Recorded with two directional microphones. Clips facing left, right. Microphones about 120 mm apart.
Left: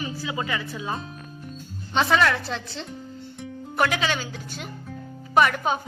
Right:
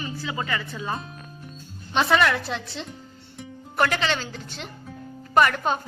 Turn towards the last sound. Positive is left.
turn(degrees=5)  # may be behind; listen again after turning